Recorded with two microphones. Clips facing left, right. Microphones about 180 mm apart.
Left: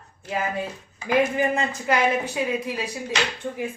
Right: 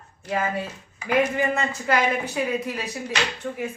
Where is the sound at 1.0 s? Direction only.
25° left (ahead or behind).